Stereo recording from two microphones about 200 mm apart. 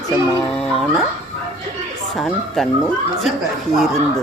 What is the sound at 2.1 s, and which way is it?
Speech, centre (ahead or behind).